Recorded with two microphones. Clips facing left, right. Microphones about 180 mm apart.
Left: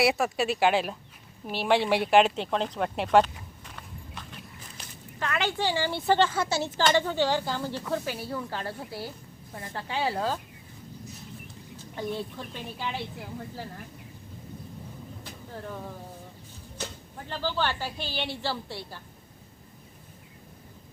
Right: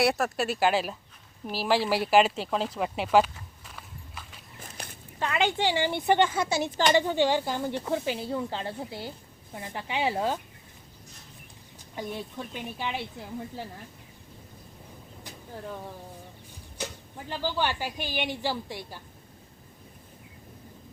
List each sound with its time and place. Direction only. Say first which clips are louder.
0.0 s speech: left 1 dB; centre (ahead or behind)
3.8 s walk: left 2 dB; 5° right (ahead or behind)
5.2 s a woman's voice: right 2 dB; 20° right (ahead or behind)
11.9 s a woman's voice: left 2 dB; 15° right (ahead or behind)
17.2 s a woman's voice: even; 10° right (ahead or behind)